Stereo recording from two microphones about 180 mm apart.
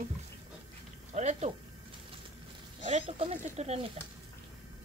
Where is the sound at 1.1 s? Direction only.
40° right (ahead or behind).